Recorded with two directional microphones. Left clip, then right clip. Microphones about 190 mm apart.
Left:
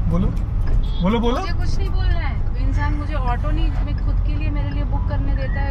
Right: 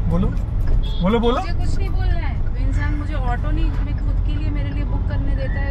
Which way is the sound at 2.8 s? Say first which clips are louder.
Left 2 dB; 5° left (ahead or behind).